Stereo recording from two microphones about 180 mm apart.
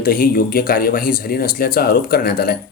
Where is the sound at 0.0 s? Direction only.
55° left (ahead or behind).